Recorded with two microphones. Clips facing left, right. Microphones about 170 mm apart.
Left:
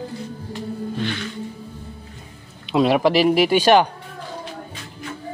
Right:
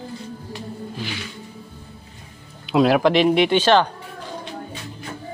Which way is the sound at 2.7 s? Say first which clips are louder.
Right 1 dB; centre (ahead or behind).